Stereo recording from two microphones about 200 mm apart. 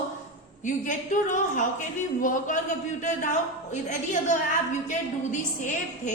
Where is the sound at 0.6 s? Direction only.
40° left (ahead or behind).